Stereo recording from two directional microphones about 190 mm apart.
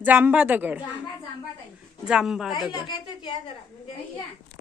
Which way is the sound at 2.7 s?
25° left (ahead or behind).